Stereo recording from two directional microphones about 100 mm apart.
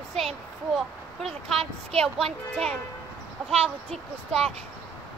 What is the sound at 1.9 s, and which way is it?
Speech, 5° left (ahead or behind).